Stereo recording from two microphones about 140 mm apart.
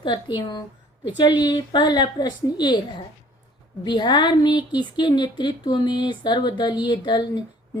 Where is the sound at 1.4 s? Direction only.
30° left (ahead or behind).